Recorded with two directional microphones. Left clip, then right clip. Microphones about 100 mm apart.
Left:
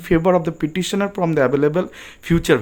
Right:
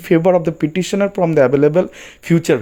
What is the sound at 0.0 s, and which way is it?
Speech, 25° right (ahead or behind).